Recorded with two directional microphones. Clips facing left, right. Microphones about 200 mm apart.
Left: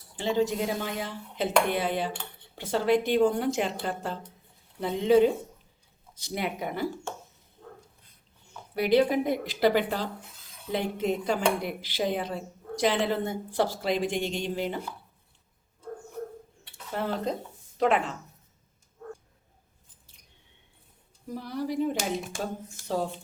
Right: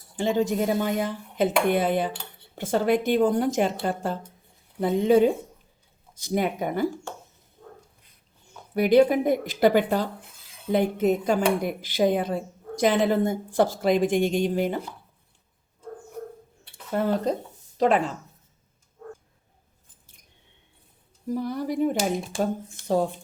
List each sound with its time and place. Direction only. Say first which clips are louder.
0.2 s speech: right 3 dB; 50° right (ahead or behind)
8.7 s speech: right 5 dB; 45° right (ahead or behind)
16.9 s speech: right 6 dB; 45° right (ahead or behind)
21.3 s speech: right 3 dB; 50° right (ahead or behind)
21.9 s speech: right 5 dB; 30° right (ahead or behind)